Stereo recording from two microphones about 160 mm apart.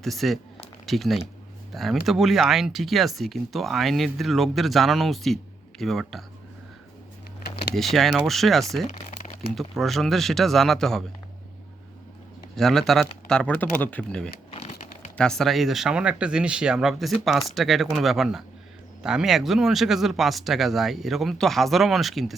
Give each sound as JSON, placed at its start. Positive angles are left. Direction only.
{"t": 0.0, "sound": "speech", "side_deg": 0}
{"t": 7.8, "sound": "speech", "side_deg": 0}
{"t": 12.5, "sound": "speech", "side_deg": 0}
{"t": 14.5, "sound": "a sound", "side_deg": 40}
{"t": 15.2, "sound": "speech", "side_deg": 5}